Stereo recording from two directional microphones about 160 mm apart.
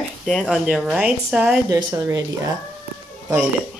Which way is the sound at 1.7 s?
20° right (ahead or behind).